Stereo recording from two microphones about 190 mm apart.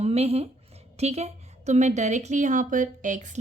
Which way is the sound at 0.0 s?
35° right (ahead or behind).